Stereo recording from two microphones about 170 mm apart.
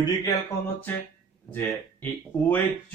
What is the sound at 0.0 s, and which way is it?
Speech, 20° left (ahead or behind).